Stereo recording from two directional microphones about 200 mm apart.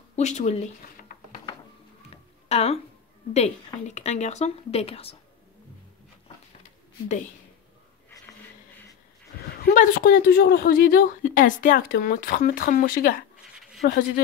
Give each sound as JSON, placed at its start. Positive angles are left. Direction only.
{"t": 0.1, "sound": "speech", "side_deg": 35}
{"t": 2.4, "sound": "a woman's voice", "side_deg": 30}
{"t": 9.4, "sound": "a man's voice", "side_deg": 45}